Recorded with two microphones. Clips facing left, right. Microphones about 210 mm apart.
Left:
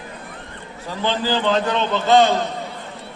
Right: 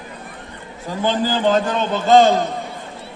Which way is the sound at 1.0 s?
45° right (ahead or behind).